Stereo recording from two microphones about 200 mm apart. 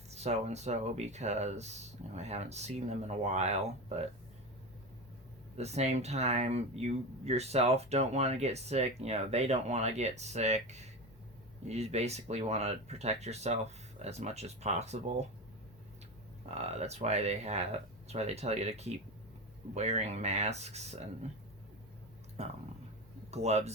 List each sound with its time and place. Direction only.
0.1 s speech: 35° right (ahead or behind)
5.5 s speech: 30° right (ahead or behind)
16.5 s speech: 30° right (ahead or behind)
22.4 s speech: 35° right (ahead or behind)